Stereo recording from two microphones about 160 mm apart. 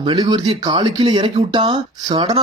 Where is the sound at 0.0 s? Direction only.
30° right (ahead or behind).